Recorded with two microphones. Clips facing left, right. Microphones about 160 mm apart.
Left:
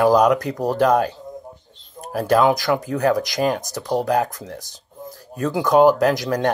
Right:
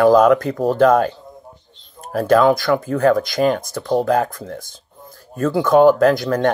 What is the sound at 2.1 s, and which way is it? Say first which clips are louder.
Speech: right 3 dB; 15° left (ahead or behind).